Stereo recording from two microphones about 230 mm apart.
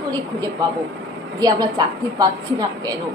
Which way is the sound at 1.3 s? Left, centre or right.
Centre.